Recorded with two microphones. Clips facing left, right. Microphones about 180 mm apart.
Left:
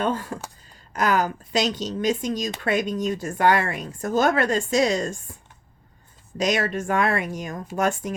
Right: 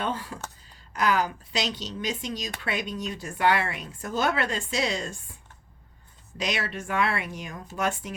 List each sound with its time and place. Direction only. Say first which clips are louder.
0.0 s speech: left 6 dB; 45° left (ahead or behind)